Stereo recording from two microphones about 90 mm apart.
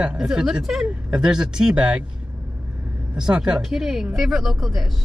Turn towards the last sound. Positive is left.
turn(degrees=0)  # may be behind; listen again after turning